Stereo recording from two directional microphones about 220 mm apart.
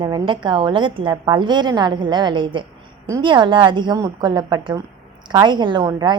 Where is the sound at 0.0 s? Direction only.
20° right (ahead or behind).